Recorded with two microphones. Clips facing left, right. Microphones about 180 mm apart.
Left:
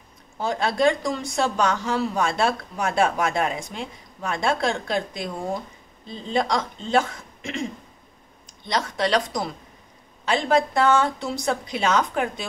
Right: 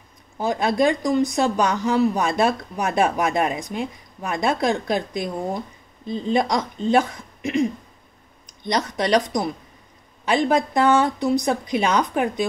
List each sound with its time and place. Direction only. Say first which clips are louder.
0.4 s a woman's voice: right 2 dB; 15° right (ahead or behind)
8.6 s a woman's voice: right 2 dB; 15° right (ahead or behind)